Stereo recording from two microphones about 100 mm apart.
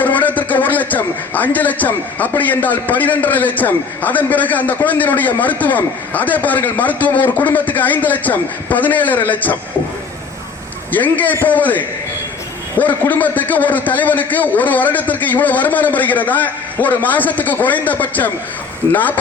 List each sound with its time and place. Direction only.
0.0 s a man's voice: 15° left (ahead or behind)
10.9 s a man's voice: 15° left (ahead or behind)